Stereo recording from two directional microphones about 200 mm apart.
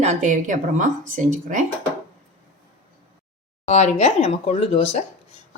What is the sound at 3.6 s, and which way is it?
Speech, 35° left (ahead or behind).